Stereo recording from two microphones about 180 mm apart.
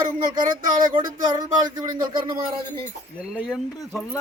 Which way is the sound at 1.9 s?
25° right (ahead or behind).